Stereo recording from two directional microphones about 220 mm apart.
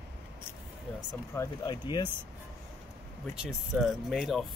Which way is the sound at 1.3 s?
20° left (ahead or behind).